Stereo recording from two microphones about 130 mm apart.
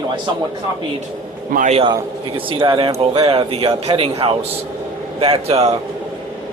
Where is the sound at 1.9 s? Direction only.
40° right (ahead or behind).